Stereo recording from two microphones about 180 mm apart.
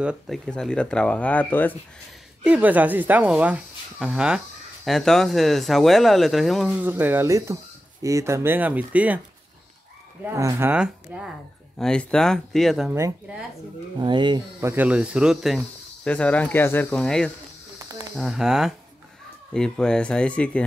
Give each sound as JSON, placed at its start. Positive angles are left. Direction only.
{"t": 0.0, "sound": "speech", "side_deg": -5}
{"t": 0.5, "sound": "speech", "side_deg": 5}
{"t": 2.4, "sound": "speech", "side_deg": -10}
{"t": 10.3, "sound": "speech", "side_deg": -15}
{"t": 13.9, "sound": "speech", "side_deg": -25}
{"t": 14.6, "sound": "speech", "side_deg": -10}
{"t": 17.7, "sound": "snake", "side_deg": -20}
{"t": 18.1, "sound": "speech", "side_deg": 0}